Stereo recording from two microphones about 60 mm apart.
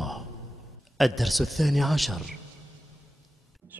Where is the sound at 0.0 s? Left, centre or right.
Centre.